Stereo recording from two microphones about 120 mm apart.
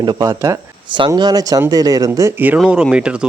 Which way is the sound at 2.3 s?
15° right (ahead or behind).